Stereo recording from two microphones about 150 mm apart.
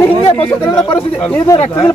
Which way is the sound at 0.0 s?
15° left (ahead or behind).